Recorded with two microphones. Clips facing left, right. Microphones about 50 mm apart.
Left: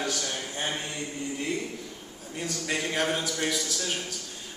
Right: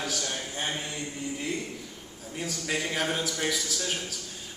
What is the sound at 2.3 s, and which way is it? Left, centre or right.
A man's voice, centre.